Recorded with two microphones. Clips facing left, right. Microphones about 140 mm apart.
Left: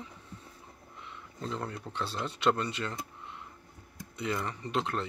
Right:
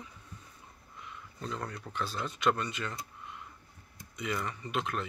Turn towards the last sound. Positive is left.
turn(degrees=30)  # may be behind; listen again after turning